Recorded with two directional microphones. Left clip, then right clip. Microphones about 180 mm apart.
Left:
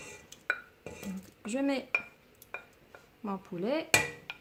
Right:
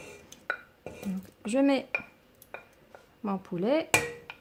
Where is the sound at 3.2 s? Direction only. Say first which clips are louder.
Right 5 dB; 40° right (ahead or behind).